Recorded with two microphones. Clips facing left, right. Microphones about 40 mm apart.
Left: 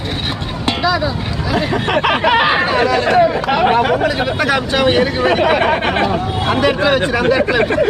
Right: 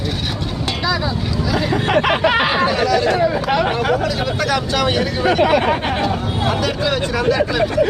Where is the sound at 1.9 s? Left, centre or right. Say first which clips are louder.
Left 2 dB; centre.